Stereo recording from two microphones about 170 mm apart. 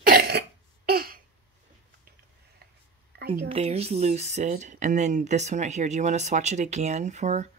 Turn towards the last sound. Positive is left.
turn(degrees=-40)  # may be behind; listen again after turning